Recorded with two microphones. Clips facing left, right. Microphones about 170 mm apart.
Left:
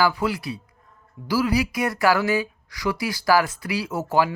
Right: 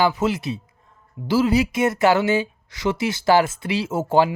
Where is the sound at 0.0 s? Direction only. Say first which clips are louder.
Right 2 dB; 20° right (ahead or behind).